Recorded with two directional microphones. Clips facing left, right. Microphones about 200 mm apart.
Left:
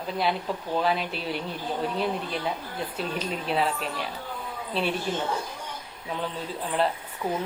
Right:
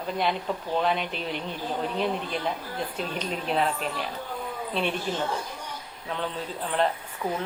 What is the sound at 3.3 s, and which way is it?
Speech, centre (ahead or behind).